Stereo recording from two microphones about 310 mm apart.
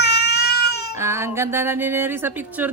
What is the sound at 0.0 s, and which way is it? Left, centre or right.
Crying, left.